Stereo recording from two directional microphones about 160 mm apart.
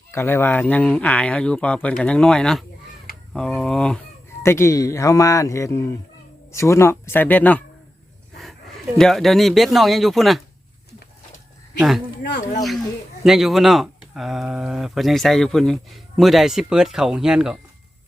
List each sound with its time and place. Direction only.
0.1 s speech: 15° left (ahead or behind)
4.4 s speech: 15° left (ahead or behind)
9.0 s speech: centre (ahead or behind)
11.8 s speech: centre (ahead or behind)
13.2 s speech: centre (ahead or behind)